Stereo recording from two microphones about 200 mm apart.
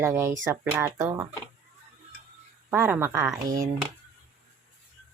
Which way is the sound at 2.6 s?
10° right (ahead or behind).